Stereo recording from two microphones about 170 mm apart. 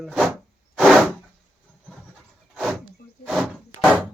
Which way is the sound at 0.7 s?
Centre (ahead or behind).